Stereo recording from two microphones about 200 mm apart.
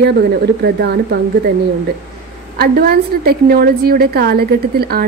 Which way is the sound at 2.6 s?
50° right (ahead or behind).